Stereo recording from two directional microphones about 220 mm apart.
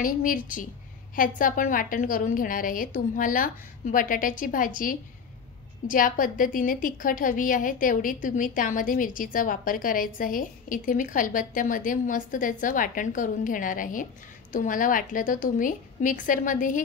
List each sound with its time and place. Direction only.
0.0 s a woman's voice: 40° left (ahead or behind)